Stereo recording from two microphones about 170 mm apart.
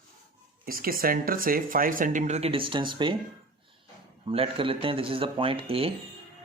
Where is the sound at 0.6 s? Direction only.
60° right (ahead or behind); by 3.2 s 30° right (ahead or behind).